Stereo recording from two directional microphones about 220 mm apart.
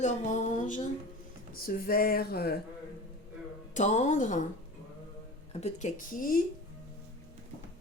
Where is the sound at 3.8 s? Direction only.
30° left (ahead or behind).